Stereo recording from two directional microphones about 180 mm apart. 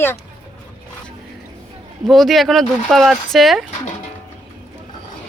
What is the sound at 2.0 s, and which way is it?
Speech, centre (ahead or behind).